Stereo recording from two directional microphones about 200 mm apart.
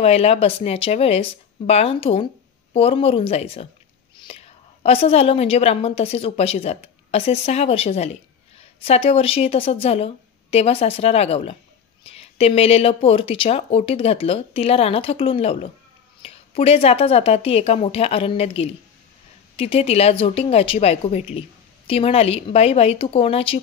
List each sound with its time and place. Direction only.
0.0 s a woman's voice: 30° left (ahead or behind)
4.8 s a woman's voice: 30° left (ahead or behind)